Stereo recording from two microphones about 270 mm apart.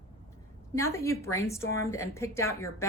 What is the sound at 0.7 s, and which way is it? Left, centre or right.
A woman's voice, centre.